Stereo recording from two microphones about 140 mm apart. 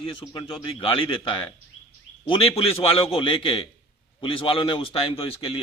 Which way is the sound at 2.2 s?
40° left (ahead or behind).